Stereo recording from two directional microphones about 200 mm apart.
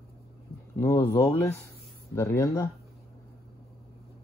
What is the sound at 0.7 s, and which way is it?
Speech, 15° left (ahead or behind).